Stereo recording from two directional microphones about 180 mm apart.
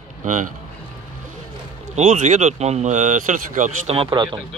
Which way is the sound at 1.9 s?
45° right (ahead or behind).